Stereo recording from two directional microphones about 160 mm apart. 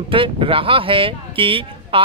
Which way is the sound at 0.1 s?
35° right (ahead or behind).